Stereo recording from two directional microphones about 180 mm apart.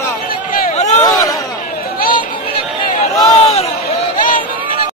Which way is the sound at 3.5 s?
35° left (ahead or behind).